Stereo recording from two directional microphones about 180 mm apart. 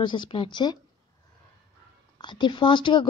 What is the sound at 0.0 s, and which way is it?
Speech, 25° left (ahead or behind).